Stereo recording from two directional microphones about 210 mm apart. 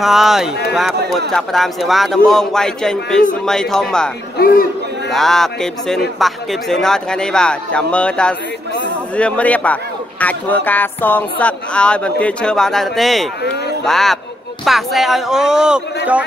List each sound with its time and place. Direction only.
0.0 s speech: centre (ahead or behind)
4.4 s a man's voice: 45° left (ahead or behind)
5.1 s speech: centre (ahead or behind)